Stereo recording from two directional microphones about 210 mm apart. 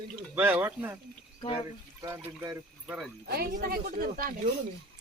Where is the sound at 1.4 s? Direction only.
25° left (ahead or behind).